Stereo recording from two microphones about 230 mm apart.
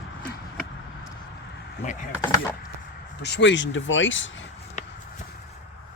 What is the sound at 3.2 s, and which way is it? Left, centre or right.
Speech, left.